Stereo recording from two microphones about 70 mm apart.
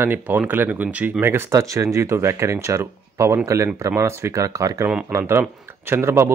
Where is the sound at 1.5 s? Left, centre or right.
Right.